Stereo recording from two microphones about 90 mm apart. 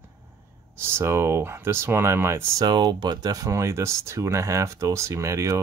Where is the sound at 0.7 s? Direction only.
30° right (ahead or behind).